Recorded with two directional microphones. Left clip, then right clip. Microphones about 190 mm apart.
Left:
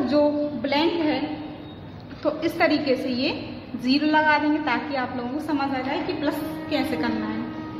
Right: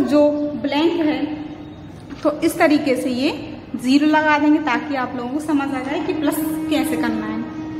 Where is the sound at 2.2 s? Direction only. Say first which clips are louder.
Right 5 dB; 20° right (ahead or behind).